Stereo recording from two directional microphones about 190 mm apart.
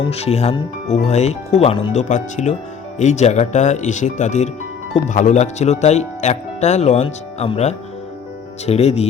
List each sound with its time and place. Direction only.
0.0 s speech: 35° left (ahead or behind)